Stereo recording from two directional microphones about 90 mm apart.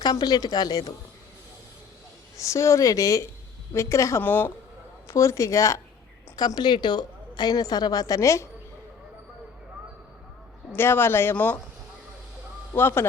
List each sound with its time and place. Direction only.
0.0 s a woman's voice: 50° left (ahead or behind)
2.4 s speech: 35° left (ahead or behind)
4.2 s speech: 20° left (ahead or behind)
5.0 s speech: 35° left (ahead or behind)
6.3 s a woman's voice: 50° left (ahead or behind)
10.8 s speech: 25° left (ahead or behind)
12.7 s speech: 25° left (ahead or behind)